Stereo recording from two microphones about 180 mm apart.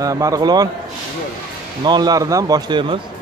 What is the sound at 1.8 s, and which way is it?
A man's voice, 25° right (ahead or behind).